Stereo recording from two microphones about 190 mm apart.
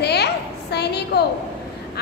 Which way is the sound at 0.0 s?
60° left (ahead or behind).